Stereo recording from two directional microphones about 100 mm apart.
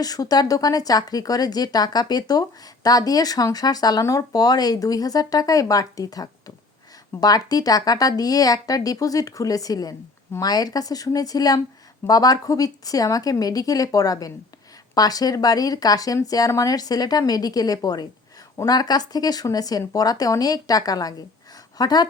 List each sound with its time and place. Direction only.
0.0 s a woman's voice: 40° left (ahead or behind)